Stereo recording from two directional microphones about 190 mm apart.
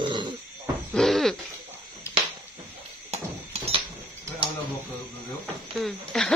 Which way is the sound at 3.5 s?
30° right (ahead or behind).